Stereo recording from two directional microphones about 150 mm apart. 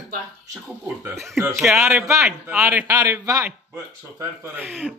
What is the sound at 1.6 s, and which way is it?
A man's voice, centre (ahead or behind).